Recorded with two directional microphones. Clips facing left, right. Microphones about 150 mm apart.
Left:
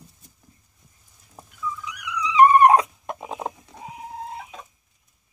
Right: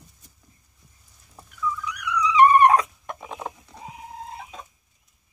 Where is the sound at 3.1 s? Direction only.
30° left (ahead or behind).